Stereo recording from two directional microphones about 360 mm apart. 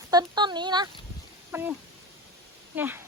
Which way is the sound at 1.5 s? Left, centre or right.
Centre.